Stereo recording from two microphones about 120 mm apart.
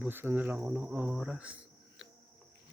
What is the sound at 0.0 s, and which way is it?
Speech, 15° right (ahead or behind).